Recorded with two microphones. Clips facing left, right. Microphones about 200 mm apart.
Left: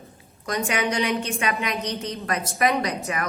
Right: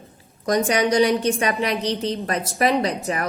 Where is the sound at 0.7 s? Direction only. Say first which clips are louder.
Right 6 dB; 35° right (ahead or behind).